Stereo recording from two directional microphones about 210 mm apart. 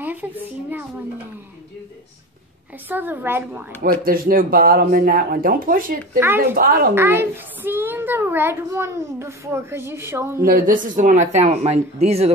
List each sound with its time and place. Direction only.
0.0 s a child's voice: 10° right (ahead or behind)
2.9 s a child's voice: 10° right (ahead or behind)
3.8 s speech: 45° right (ahead or behind)
6.1 s a child's voice: 10° right (ahead or behind)
6.5 s speech: 45° right (ahead or behind)
7.0 s a child's voice: 10° right (ahead or behind)
10.4 s speech: 40° right (ahead or behind)